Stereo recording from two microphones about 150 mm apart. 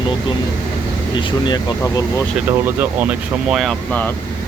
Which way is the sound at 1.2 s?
30° left (ahead or behind).